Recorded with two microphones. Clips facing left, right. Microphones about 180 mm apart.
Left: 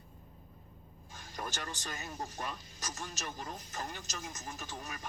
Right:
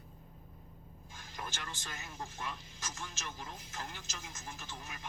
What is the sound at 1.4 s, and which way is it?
Speech, 45° left (ahead or behind).